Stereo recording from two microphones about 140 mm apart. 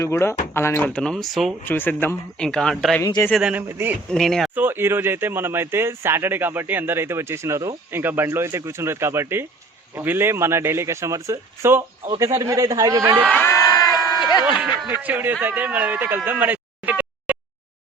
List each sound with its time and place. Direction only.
0.0 s speech: 20° left (ahead or behind)
0.9 s speech: 5° left (ahead or behind)
1.6 s speech: 15° left (ahead or behind)
3.0 s speech: 25° left (ahead or behind)
3.4 s speech: 10° right (ahead or behind)
4.1 s speech: centre (ahead or behind)
4.5 s a man's voice: 15° right (ahead or behind)
13.3 s crowd: 20° left (ahead or behind)
14.4 s speech: 10° right (ahead or behind)